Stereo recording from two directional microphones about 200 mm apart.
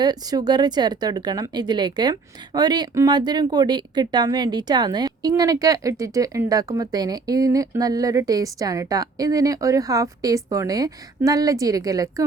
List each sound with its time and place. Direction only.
0.0 s speech: 20° right (ahead or behind)